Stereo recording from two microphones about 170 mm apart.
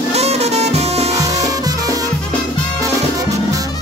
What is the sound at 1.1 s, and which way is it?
Music, 20° right (ahead or behind).